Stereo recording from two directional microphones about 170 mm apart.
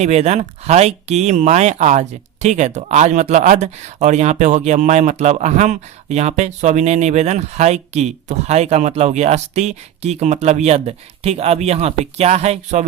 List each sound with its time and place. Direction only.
0.0 s speech: 40° right (ahead or behind)